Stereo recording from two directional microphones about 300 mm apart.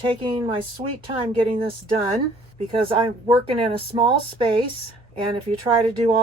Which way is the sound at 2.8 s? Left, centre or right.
Centre.